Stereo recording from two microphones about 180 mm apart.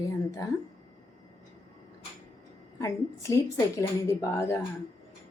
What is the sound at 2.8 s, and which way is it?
A woman's voice, 15° left (ahead or behind).